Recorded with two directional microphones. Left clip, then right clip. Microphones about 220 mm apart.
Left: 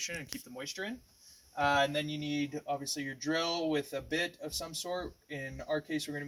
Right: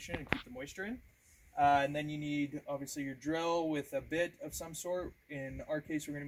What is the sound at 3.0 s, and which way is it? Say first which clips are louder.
Speech: even; 15° left (ahead or behind).